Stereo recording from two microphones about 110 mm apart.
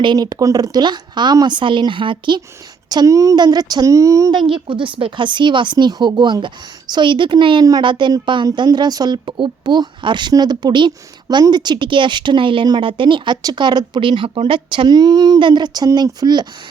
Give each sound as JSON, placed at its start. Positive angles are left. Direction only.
{"t": 0.0, "sound": "speech", "side_deg": -40}
{"t": 2.9, "sound": "speech", "side_deg": -35}
{"t": 4.3, "sound": "speech", "side_deg": -45}